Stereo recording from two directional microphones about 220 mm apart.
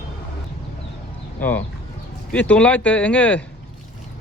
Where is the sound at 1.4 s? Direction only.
10° left (ahead or behind).